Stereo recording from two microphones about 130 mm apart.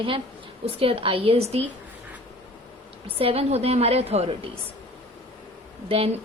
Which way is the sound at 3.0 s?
50° right (ahead or behind).